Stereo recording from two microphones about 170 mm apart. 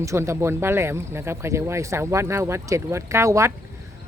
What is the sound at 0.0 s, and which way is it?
Speech, 15° right (ahead or behind).